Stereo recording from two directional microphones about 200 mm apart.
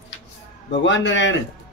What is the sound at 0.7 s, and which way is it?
Speech, 65° left (ahead or behind).